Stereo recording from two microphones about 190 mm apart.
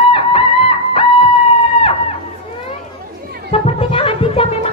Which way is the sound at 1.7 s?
30° left (ahead or behind).